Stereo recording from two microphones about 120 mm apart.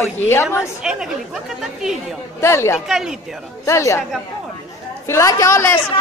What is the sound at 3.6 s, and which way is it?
Speech, 25° left (ahead or behind).